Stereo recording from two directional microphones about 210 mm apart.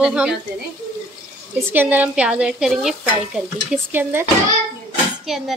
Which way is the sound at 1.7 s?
10° right (ahead or behind).